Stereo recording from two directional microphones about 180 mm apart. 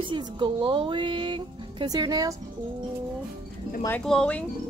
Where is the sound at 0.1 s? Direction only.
25° right (ahead or behind).